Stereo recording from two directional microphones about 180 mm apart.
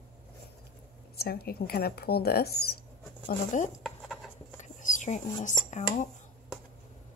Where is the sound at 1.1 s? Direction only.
60° left (ahead or behind).